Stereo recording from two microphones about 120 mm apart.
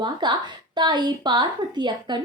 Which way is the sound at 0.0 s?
40° right (ahead or behind).